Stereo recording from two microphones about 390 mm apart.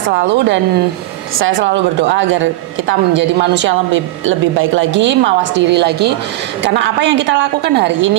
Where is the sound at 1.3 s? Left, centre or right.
Right.